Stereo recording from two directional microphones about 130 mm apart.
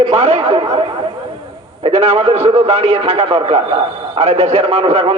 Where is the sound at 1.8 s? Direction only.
55° right (ahead or behind).